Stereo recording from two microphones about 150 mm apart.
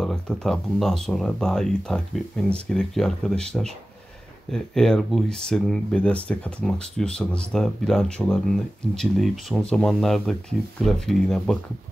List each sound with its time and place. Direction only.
0.0 s speech: 5° left (ahead or behind)